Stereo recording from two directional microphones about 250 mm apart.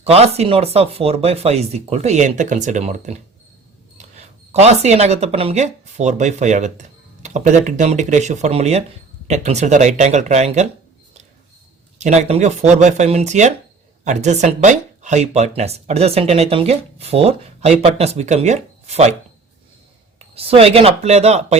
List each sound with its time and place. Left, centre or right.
0.0 s speech: right
4.5 s speech: right
11.9 s speech: right
20.1 s speech: right